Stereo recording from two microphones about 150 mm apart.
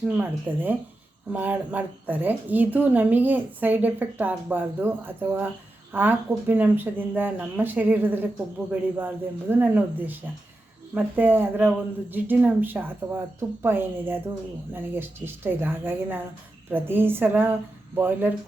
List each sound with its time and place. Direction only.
0.0 s a woman's voice: 10° right (ahead or behind)